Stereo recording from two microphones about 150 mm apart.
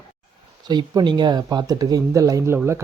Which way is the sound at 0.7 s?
30° right (ahead or behind).